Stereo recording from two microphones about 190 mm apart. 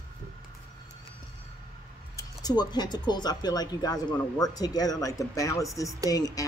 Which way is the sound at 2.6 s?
20° left (ahead or behind).